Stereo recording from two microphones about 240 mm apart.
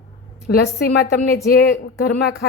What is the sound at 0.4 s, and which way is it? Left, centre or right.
Speech, left.